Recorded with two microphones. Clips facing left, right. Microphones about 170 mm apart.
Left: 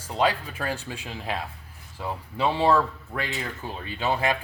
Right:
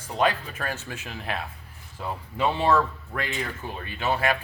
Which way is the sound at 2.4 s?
10° left (ahead or behind).